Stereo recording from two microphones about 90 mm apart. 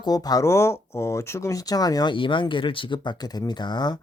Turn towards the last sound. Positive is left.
turn(degrees=50)  # may be behind; listen again after turning